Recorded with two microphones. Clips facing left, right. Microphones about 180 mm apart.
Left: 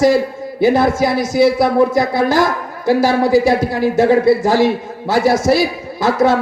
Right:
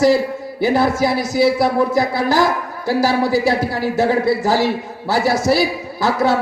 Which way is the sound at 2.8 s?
50° left (ahead or behind).